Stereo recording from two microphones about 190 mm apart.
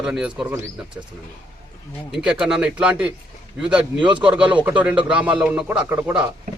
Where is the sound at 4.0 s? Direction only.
25° right (ahead or behind).